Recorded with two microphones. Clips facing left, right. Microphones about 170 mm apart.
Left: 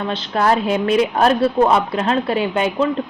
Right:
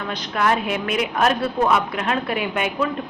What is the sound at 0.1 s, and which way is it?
A woman's voice, 30° left (ahead or behind).